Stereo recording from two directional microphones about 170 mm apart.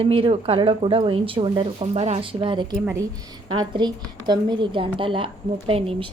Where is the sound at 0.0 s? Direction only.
30° right (ahead or behind).